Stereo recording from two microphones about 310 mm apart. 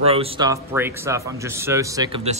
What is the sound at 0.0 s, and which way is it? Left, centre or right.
A man's voice, centre.